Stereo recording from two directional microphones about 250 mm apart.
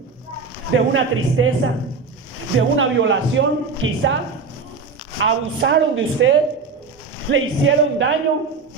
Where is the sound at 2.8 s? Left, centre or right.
Right.